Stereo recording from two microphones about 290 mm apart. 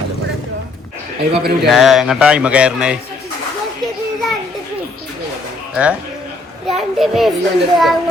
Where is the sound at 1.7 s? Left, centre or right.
Centre.